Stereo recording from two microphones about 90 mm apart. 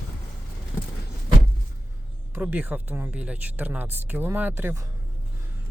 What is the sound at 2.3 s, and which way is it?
Speech, 20° right (ahead or behind).